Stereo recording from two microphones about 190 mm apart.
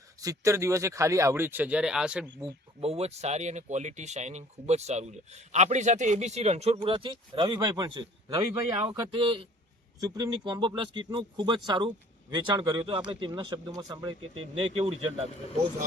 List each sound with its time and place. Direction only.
0.2 s speech: 15° right (ahead or behind)
2.8 s speech: 35° right (ahead or behind)